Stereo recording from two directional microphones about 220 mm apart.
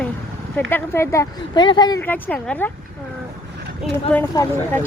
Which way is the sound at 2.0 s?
5° left (ahead or behind).